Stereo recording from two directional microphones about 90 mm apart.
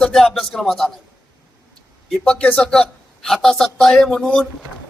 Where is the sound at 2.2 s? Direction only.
10° left (ahead or behind).